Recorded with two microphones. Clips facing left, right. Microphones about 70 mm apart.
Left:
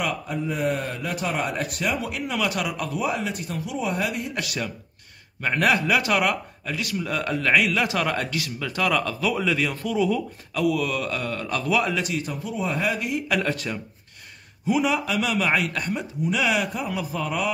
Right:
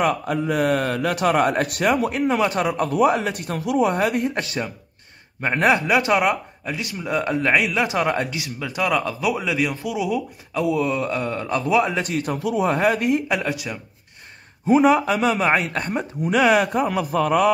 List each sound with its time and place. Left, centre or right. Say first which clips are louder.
0.3 s speech: right 5 dB; right
2.9 s speech: right 8 dB; right
4.3 s speech: right 3 dB; right; by 10.6 s centre
10.6 s speech: right 2 dB; right
12.0 s speech: right 4 dB; right
13.4 s speech: even; centre
14.7 s speech: right 7 dB; right